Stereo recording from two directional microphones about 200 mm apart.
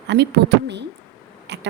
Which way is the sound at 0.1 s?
55° right (ahead or behind).